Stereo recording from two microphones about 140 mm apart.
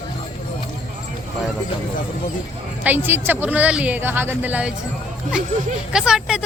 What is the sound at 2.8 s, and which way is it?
Speech, 15° right (ahead or behind).